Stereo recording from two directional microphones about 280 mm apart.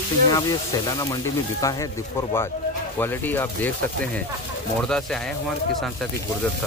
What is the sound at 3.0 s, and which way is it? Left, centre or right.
Speech, centre.